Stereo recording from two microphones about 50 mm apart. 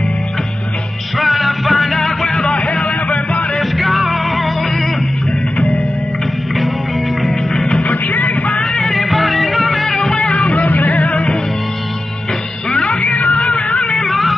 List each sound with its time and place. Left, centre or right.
1.1 s music: centre
2.5 s a sound: left
3.5 s music: centre
7.2 s music: centre
7.8 s music: left
8.7 s music: centre
10.1 s music: centre
10.5 s music: left
12.6 s music: centre
13.0 s cat: left
13.3 s music: centre
13.9 s music: centre